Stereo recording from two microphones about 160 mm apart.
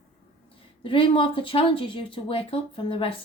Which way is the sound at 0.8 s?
30° left (ahead or behind).